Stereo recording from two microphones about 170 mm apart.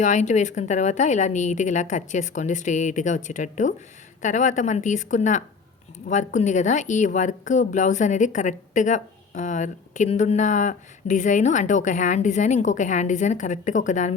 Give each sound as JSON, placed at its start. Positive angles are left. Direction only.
{"t": 0.0, "sound": "a woman's voice", "side_deg": 45}